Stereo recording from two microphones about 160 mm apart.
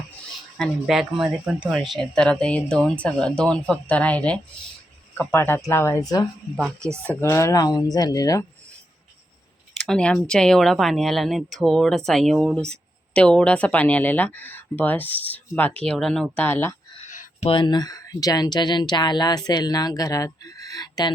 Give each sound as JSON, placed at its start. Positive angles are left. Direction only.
{"t": 0.5, "sound": "speech", "side_deg": 0}
{"t": 9.8, "sound": "speech", "side_deg": 5}
{"t": 17.0, "sound": "a sound", "side_deg": 45}
{"t": 17.5, "sound": "speech", "side_deg": 25}